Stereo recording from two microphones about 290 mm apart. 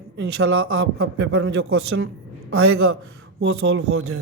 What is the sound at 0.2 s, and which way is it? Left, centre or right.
Speech, right.